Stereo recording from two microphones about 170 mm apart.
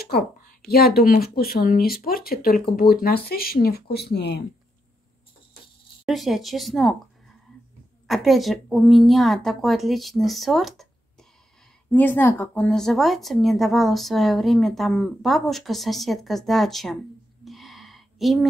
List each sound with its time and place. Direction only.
0.0 s a sound: 65° left (ahead or behind)
0.7 s speech: 65° left (ahead or behind)
6.0 s speech: centre (ahead or behind)
8.1 s speech: centre (ahead or behind)
11.9 s speech: 10° left (ahead or behind)
17.5 s a sound: centre (ahead or behind)